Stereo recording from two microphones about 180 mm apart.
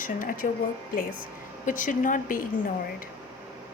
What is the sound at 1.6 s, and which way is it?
Speech, 45° left (ahead or behind).